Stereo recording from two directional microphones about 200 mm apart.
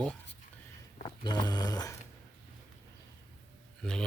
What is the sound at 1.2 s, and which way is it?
Speech, 20° left (ahead or behind).